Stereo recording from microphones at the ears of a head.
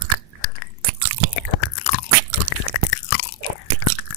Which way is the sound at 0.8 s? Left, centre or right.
Right.